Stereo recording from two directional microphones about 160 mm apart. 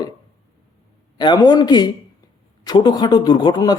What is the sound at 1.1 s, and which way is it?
A man's voice, 25° left (ahead or behind).